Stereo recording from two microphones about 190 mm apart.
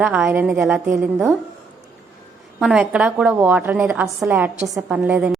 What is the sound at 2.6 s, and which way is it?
A woman's voice, 5° right (ahead or behind).